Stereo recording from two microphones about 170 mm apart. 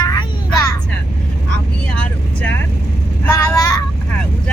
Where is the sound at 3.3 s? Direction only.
20° left (ahead or behind).